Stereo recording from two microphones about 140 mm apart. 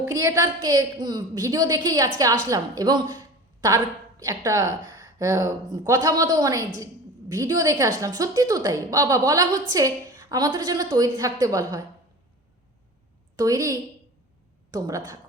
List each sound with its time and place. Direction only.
0.1 s a woman's voice: 20° right (ahead or behind)
4.2 s a woman's voice: 25° right (ahead or behind)
13.3 s a woman's voice: 25° right (ahead or behind)